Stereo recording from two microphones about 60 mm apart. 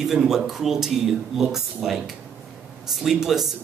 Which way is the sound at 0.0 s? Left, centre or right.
Centre.